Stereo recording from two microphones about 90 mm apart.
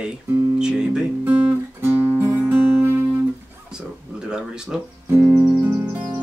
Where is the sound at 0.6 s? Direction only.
10° right (ahead or behind).